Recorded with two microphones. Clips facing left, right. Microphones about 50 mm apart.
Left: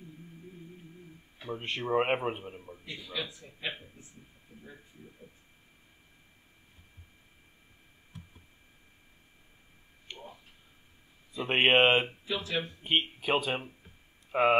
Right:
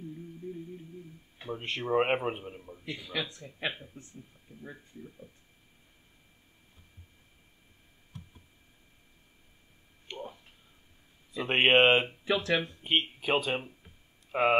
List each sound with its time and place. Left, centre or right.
1.5 s a man's voice: centre
3.0 s speech: right
10.1 s a sound: centre
11.3 s a man's voice: centre
12.3 s speech: right
12.8 s a man's voice: centre